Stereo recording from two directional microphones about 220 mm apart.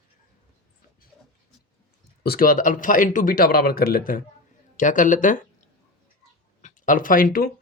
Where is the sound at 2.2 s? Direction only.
40° left (ahead or behind).